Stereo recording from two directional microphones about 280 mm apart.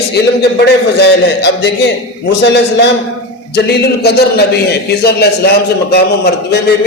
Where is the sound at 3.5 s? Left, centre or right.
Left.